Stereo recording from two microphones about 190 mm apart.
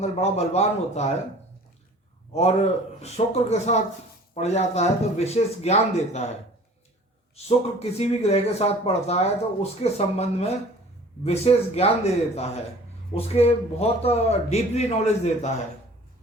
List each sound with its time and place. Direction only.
0.0 s a man's voice: 35° left (ahead or behind)
2.3 s a man's voice: 35° left (ahead or behind)
7.4 s a man's voice: 35° left (ahead or behind)